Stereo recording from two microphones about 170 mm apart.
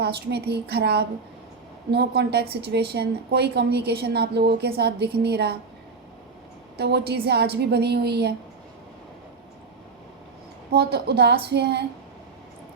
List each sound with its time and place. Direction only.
0.0 s a woman's voice: 75° right (ahead or behind)
6.7 s a woman's voice: 70° right (ahead or behind)
10.7 s a woman's voice: 70° right (ahead or behind)